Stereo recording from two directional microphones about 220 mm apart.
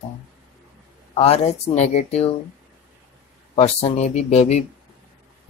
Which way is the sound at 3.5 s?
30° left (ahead or behind).